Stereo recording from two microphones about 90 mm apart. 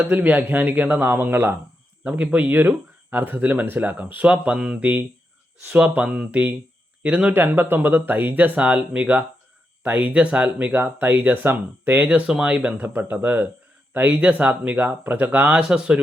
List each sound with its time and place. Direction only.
0.0 s speech: 15° right (ahead or behind)